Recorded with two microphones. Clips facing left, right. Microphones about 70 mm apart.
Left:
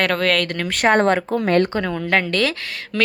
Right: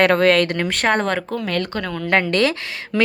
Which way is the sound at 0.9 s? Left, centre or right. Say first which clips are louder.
Left 5 dB; left.